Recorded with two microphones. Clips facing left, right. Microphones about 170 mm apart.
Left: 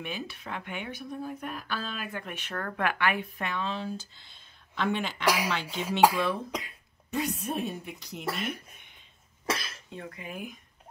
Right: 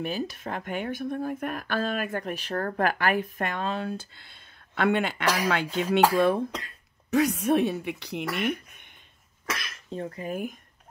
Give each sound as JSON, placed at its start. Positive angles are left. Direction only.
{"t": 0.0, "sound": "a woman's voice", "side_deg": -40}
{"t": 5.2, "sound": "speech", "side_deg": 10}
{"t": 6.1, "sound": "speech", "side_deg": -50}
{"t": 7.1, "sound": "speech", "side_deg": -85}
{"t": 9.5, "sound": "cough", "side_deg": 30}
{"t": 9.8, "sound": "speech", "side_deg": -35}